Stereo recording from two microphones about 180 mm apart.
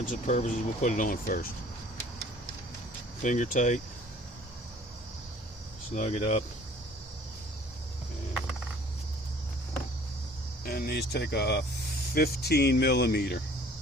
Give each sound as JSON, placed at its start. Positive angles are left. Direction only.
{"t": 0.0, "sound": "speech", "side_deg": 45}
{"t": 3.2, "sound": "speech", "side_deg": 45}
{"t": 5.9, "sound": "speech", "side_deg": 40}
{"t": 10.6, "sound": "speech", "side_deg": 55}